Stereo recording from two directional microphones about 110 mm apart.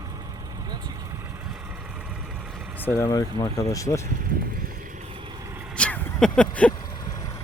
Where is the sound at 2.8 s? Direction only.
25° left (ahead or behind).